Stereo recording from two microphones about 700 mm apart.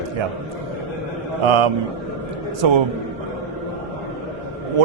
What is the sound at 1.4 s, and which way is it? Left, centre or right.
A man's voice, right.